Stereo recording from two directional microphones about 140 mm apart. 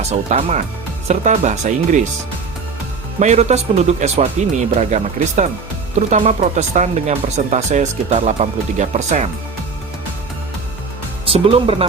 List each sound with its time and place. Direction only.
0.1 s speech: 50° right (ahead or behind)
3.2 s speech: 55° right (ahead or behind)
11.3 s speech: 40° right (ahead or behind)